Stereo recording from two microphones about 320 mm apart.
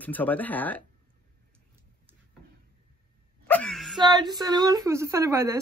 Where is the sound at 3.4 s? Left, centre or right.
Centre.